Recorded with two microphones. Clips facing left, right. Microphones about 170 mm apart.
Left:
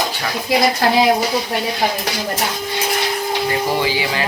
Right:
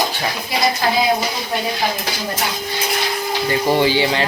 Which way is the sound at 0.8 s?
80° left.